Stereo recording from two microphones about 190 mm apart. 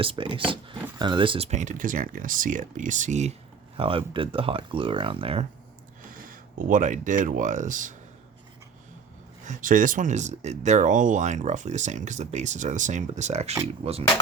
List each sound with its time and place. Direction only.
0.0 s speech: 30° right (ahead or behind)
3.8 s speech: 30° right (ahead or behind)
6.2 s speech: 45° right (ahead or behind)
9.4 s speech: 45° right (ahead or behind)